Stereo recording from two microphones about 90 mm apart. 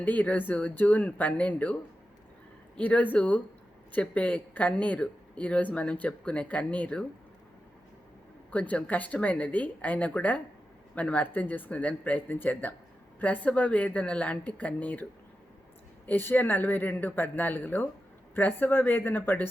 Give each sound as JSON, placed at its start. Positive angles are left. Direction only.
{"t": 0.0, "sound": "speech", "side_deg": 15}
{"t": 2.7, "sound": "speech", "side_deg": 15}
{"t": 8.4, "sound": "speech", "side_deg": 15}
{"t": 16.0, "sound": "speech", "side_deg": 20}